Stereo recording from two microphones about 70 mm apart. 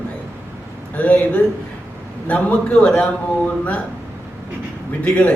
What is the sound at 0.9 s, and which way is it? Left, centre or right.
Speech, left.